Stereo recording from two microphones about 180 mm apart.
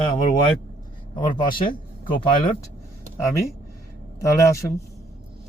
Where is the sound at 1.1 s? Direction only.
25° left (ahead or behind).